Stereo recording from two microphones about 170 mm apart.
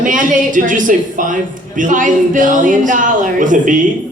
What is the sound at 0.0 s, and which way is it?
A woman's voice, 50° right (ahead or behind).